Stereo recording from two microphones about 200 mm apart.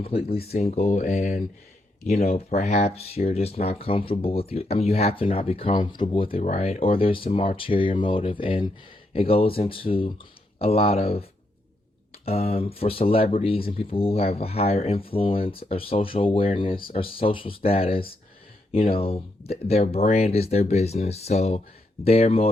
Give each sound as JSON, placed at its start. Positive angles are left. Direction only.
{"t": 0.0, "sound": "speech", "side_deg": 30}